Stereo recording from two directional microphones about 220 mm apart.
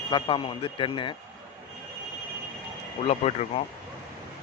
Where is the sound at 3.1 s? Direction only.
30° left (ahead or behind).